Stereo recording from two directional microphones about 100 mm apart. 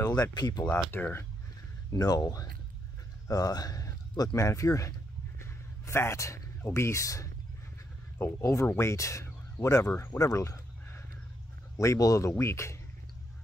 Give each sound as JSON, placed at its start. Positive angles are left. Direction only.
{"t": 0.0, "sound": "speech", "side_deg": 40}
{"t": 0.9, "sound": "speech", "side_deg": 20}
{"t": 1.9, "sound": "speech", "side_deg": 35}
{"t": 5.4, "sound": "a sound", "side_deg": 25}
{"t": 8.2, "sound": "speech", "side_deg": 25}